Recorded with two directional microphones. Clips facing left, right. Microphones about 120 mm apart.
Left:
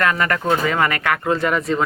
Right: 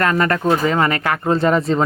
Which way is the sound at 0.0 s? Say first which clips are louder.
Right 3 dB; 35° right (ahead or behind).